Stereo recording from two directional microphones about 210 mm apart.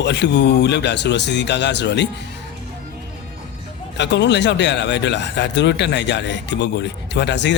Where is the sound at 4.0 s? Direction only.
55° left (ahead or behind).